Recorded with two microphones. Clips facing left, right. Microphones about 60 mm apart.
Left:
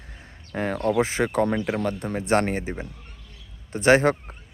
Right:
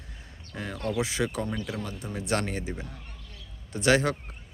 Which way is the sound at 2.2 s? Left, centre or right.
Left.